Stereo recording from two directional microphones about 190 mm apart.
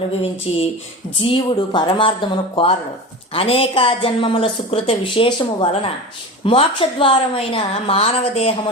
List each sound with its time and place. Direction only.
0.5 s a woman's voice: 30° left (ahead or behind)